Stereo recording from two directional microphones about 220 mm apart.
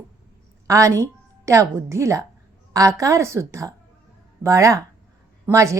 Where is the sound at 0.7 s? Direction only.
15° right (ahead or behind).